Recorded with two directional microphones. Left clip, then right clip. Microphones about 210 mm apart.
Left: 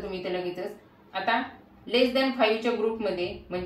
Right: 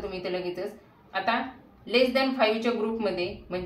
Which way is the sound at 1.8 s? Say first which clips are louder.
Even; 25° right (ahead or behind).